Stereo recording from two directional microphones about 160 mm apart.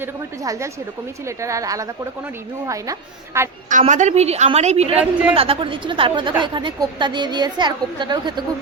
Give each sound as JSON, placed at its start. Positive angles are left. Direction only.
{"t": 0.0, "sound": "a woman's voice", "side_deg": -20}
{"t": 3.7, "sound": "a woman's voice", "side_deg": -50}